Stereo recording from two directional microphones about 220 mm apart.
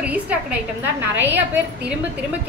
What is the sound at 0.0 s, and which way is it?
A woman's voice, 5° right (ahead or behind).